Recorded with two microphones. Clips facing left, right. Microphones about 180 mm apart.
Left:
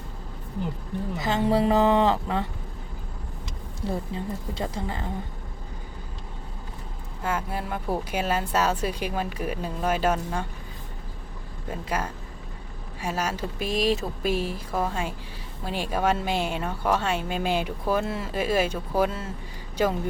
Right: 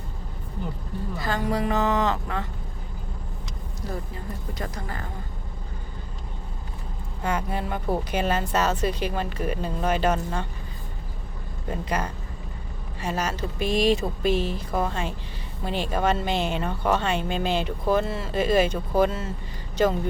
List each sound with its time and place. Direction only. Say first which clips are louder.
1.1 s speech: left 3 dB; 20° left (ahead or behind)
3.8 s speech: left 4 dB; 25° left (ahead or behind)
7.2 s speech: right 2 dB; 5° left (ahead or behind)
11.7 s a man's voice: right 2 dB; 5° left (ahead or behind)